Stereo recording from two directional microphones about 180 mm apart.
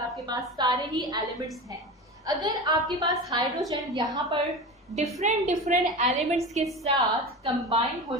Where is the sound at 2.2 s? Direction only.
20° right (ahead or behind).